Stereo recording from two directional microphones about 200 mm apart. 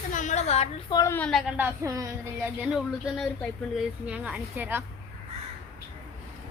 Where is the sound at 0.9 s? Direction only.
10° left (ahead or behind); by 2.5 s 15° right (ahead or behind).